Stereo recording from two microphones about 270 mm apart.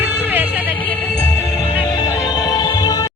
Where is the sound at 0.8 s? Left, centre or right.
Centre.